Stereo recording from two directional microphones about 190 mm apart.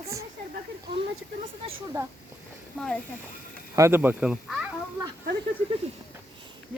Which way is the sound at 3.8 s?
10° right (ahead or behind).